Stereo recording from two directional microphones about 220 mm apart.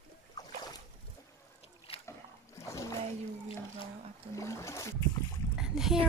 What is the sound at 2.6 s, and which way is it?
Splash, 15° left (ahead or behind).